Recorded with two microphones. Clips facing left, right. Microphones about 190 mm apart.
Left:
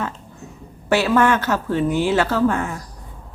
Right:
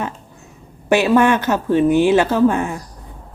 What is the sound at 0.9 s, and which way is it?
Speech, 15° right (ahead or behind).